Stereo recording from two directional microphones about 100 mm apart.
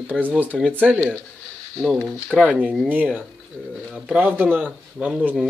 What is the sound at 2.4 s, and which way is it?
A man's voice, 15° right (ahead or behind).